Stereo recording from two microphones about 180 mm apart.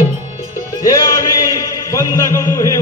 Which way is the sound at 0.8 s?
20° left (ahead or behind).